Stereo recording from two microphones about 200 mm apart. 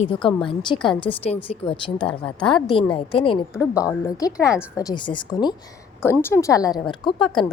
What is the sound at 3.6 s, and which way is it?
A woman's voice, 15° left (ahead or behind).